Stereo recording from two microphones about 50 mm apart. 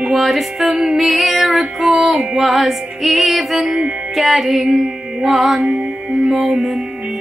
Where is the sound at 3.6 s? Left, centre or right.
Right.